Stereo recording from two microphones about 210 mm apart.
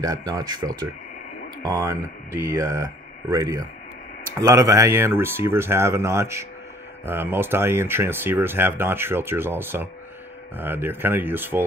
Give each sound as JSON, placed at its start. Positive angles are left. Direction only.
{"t": 0.0, "sound": "speech", "side_deg": -15}